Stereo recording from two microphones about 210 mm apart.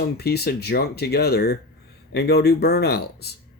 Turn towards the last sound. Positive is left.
turn(degrees=50)  # may be behind; listen again after turning